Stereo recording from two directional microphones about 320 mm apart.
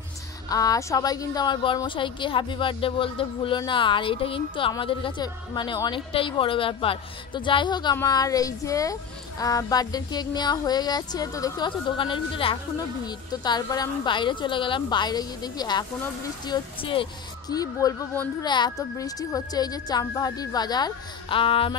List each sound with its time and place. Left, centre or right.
0.5 s a woman's voice: centre